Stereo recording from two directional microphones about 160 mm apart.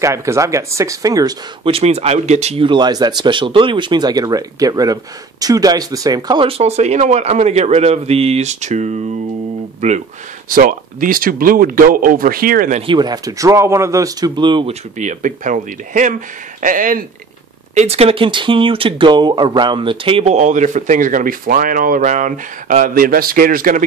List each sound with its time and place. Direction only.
0.0 s speech: 20° right (ahead or behind)
1.6 s speech: 40° right (ahead or behind)
6.6 s speech: 45° right (ahead or behind)
10.5 s speech: 60° right (ahead or behind)
12.7 s speech: 30° right (ahead or behind)
15.0 s speech: 50° right (ahead or behind)
17.7 s speech: 40° right (ahead or behind); by 23.8 s 60° right (ahead or behind)